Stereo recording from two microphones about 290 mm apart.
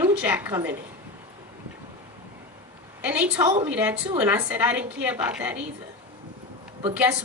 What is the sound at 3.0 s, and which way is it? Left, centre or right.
Speech, centre.